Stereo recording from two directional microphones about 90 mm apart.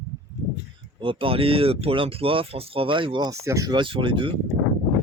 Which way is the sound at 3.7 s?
65° right (ahead or behind).